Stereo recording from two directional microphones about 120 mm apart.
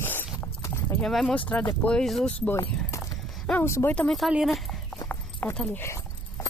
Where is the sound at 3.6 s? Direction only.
20° left (ahead or behind).